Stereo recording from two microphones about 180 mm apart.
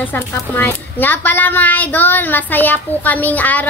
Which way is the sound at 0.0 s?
10° left (ahead or behind).